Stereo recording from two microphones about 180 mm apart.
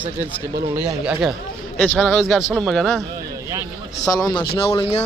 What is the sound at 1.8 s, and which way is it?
A man's voice, 10° left (ahead or behind).